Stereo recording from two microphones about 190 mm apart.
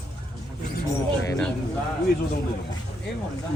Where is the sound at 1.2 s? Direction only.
15° left (ahead or behind).